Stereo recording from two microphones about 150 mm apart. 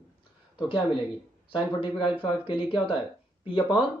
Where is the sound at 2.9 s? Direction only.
35° left (ahead or behind).